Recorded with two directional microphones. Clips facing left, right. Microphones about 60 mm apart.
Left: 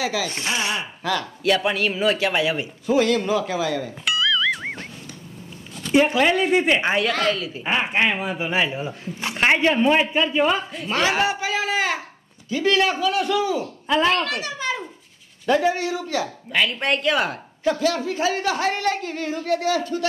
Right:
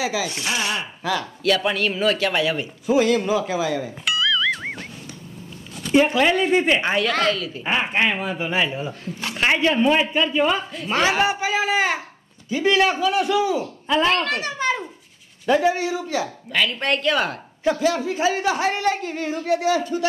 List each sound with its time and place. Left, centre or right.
0.0 s speech: centre
0.3 s a man's voice: left
1.0 s a woman's voice: centre
1.4 s a man's voice: centre
2.9 s a woman's voice: centre
4.0 s music: centre
5.8 s a man's voice: centre
7.6 s a man's voice: centre
9.2 s a man's voice: left; by 10.9 s centre
10.9 s a man's voice: centre
14.0 s a child's voice: right
15.4 s a woman's voice: centre
16.5 s a man's voice: centre
17.6 s a woman's voice: centre